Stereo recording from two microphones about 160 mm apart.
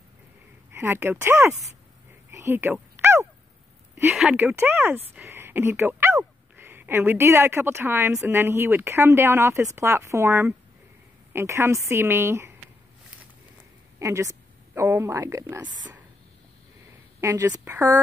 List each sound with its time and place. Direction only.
0.7 s speech: 15° right (ahead or behind)
2.3 s a sound: 15° right (ahead or behind)
4.0 s speech: 5° right (ahead or behind)
13.9 s a woman's voice: 20° right (ahead or behind)
17.2 s speech: 20° right (ahead or behind)